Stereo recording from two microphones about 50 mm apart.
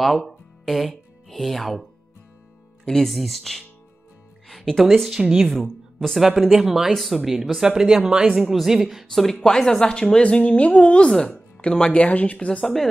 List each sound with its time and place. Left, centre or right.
0.0 s speech: centre
2.8 s speech: centre
3.1 s speech: centre
7.6 s speech: centre
9.0 s speech: centre
10.4 s speech: left
12.6 s speech: centre